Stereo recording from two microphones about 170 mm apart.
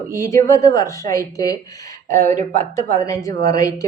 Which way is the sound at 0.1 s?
20° left (ahead or behind).